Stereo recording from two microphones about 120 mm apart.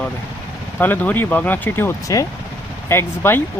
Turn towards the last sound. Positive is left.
turn(degrees=20)  # may be behind; listen again after turning